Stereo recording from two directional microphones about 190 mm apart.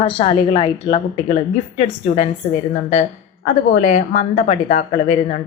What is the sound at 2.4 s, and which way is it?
Speech, 40° left (ahead or behind).